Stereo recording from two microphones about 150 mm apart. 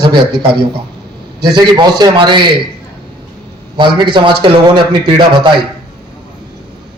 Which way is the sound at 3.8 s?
35° right (ahead or behind).